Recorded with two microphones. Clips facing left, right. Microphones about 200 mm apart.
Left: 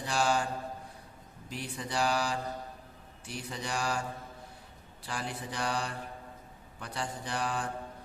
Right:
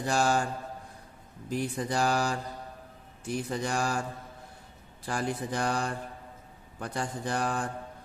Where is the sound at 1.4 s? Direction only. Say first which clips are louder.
Right 8 dB; 45° right (ahead or behind).